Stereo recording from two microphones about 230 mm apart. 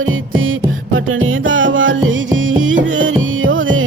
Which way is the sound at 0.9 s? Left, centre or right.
Right.